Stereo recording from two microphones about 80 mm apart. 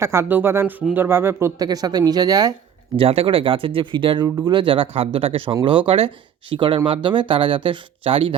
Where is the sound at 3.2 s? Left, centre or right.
Right.